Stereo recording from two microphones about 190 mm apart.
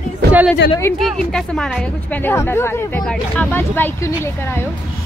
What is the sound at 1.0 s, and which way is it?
Speech, centre (ahead or behind).